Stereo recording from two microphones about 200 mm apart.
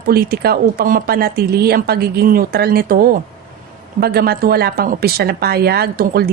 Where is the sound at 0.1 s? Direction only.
50° right (ahead or behind).